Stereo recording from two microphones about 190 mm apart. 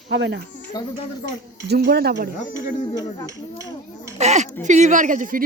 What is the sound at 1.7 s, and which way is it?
Speech, 60° right (ahead or behind).